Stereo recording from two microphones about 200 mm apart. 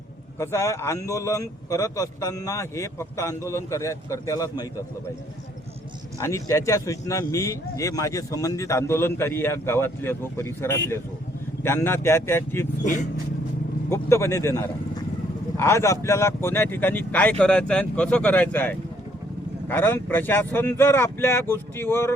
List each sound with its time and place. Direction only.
0.3 s a man's voice: 15° left (ahead or behind)
6.1 s a man's voice: 15° left (ahead or behind)
12.8 s speech: 40° left (ahead or behind)
13.9 s a man's voice: 15° left (ahead or behind)